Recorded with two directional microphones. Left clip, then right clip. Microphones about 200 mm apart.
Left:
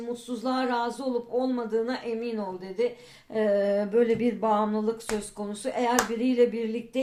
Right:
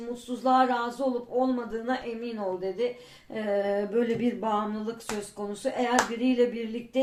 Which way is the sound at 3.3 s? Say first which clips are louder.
Left 3 dB; 30° left (ahead or behind).